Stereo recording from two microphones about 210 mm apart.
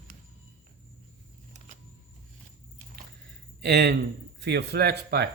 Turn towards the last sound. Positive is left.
turn(degrees=-50)  # may be behind; listen again after turning